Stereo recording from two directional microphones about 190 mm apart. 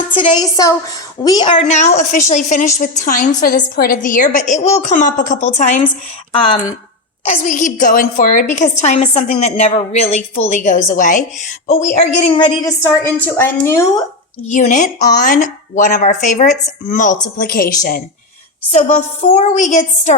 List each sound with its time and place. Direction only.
0.1 s a woman's voice: 25° left (ahead or behind)
1.5 s a woman's voice: 35° left (ahead or behind)
7.3 s a woman's voice: 40° left (ahead or behind)
12.3 s a woman's voice: 15° left (ahead or behind)
14.4 s a woman's voice: 40° left (ahead or behind)
18.7 s a woman's voice: 35° left (ahead or behind)